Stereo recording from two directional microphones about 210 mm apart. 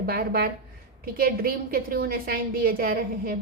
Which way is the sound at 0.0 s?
45° right (ahead or behind).